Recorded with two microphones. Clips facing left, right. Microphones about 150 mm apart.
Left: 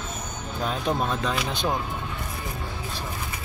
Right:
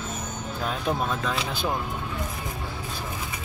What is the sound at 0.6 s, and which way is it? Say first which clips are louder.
Speech: left 2 dB; centre (ahead or behind).